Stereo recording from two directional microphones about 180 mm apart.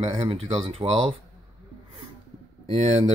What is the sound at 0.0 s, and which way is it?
Speech, 35° right (ahead or behind).